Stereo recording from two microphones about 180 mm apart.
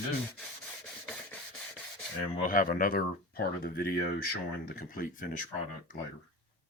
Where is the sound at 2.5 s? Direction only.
50° left (ahead or behind).